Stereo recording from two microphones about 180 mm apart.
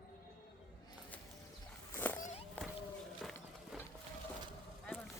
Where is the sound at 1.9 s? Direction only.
10° left (ahead or behind).